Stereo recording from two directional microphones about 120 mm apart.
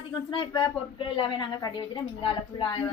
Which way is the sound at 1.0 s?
45° left (ahead or behind).